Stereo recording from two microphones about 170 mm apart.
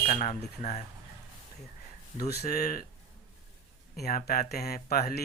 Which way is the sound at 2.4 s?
60° left (ahead or behind).